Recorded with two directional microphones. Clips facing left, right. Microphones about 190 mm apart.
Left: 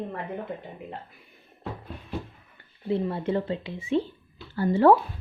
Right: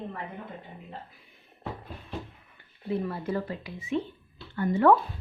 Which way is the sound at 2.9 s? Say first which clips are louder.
Left 4 dB; 25° left (ahead or behind).